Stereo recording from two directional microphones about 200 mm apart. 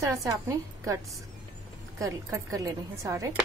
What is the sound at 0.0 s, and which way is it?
Speech, 15° right (ahead or behind).